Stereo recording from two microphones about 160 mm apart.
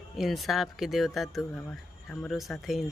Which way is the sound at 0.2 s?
Centre (ahead or behind).